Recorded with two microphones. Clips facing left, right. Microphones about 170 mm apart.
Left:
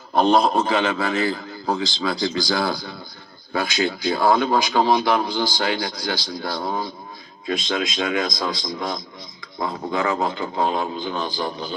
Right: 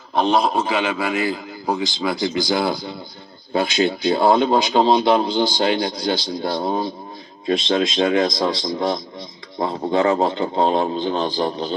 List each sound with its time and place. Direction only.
0.1 s a man's voice: centre (ahead or behind); by 11.7 s 30° right (ahead or behind)